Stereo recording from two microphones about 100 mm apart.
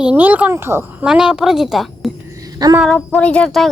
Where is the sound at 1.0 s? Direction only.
5° right (ahead or behind).